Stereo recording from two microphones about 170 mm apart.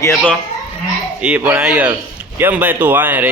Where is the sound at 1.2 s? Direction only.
10° right (ahead or behind).